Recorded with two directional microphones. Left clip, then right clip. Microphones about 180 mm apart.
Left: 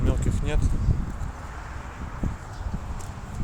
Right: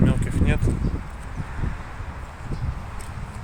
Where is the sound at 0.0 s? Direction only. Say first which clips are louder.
Right 6 dB; 5° left (ahead or behind).